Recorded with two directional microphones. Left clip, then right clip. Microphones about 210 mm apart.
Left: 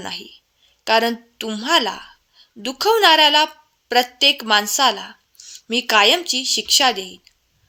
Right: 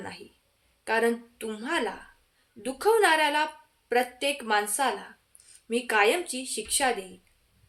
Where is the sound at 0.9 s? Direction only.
45° left (ahead or behind).